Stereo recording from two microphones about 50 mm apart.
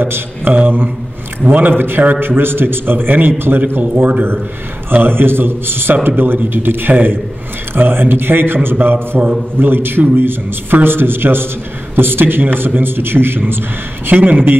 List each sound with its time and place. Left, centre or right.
0.5 s a man's voice: right
3.8 s a man's voice: right
4.8 s a man's voice: right
14.1 s a man's voice: right